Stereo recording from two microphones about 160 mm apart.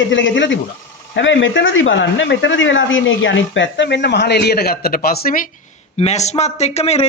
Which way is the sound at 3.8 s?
90° left.